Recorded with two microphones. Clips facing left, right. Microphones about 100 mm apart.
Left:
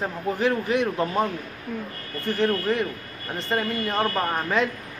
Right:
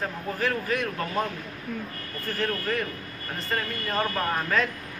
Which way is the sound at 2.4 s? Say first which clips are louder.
Left 5 dB; 20° left (ahead or behind).